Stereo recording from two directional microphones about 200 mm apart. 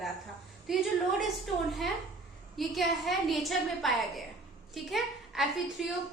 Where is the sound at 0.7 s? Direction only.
Centre (ahead or behind).